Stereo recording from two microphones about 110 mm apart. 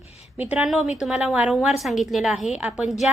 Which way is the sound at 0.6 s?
5° right (ahead or behind).